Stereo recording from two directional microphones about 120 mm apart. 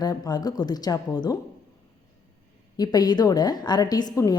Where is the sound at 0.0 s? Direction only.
35° left (ahead or behind).